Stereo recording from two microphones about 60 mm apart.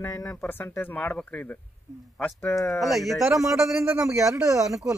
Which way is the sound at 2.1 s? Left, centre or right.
Left.